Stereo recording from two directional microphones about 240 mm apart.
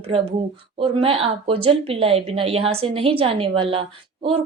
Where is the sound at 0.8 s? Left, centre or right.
Right.